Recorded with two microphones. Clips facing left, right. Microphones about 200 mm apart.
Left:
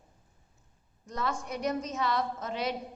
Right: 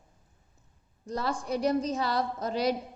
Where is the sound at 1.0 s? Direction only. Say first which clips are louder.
Right 3 dB; 35° right (ahead or behind).